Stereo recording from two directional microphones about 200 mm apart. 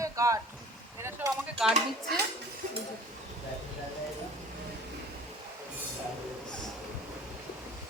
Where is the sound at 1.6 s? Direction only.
5° right (ahead or behind).